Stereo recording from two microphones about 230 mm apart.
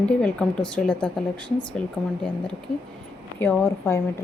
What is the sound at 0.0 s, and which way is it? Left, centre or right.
Speech, centre.